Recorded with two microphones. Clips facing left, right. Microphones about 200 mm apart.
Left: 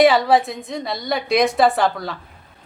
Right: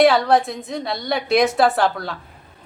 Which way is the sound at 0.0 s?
Centre (ahead or behind).